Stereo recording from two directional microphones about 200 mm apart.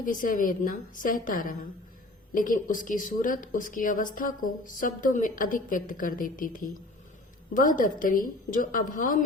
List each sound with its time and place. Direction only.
0.0 s a woman's voice: 40° left (ahead or behind)